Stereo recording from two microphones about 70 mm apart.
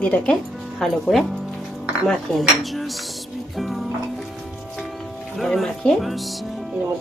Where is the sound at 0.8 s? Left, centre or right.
Centre.